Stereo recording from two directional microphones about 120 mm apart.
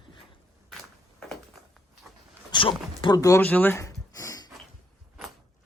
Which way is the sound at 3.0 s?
40° left (ahead or behind).